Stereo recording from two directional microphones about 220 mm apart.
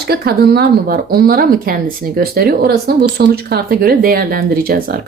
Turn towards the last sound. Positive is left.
turn(degrees=-40)  # may be behind; listen again after turning